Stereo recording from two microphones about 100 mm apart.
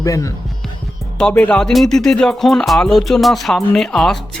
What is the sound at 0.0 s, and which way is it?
Music, 35° left (ahead or behind).